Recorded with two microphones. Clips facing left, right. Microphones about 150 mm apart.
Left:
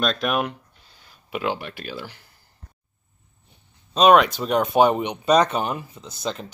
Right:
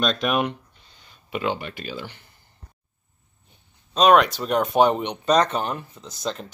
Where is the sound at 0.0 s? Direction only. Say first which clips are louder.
Right 1 dB; centre (ahead or behind).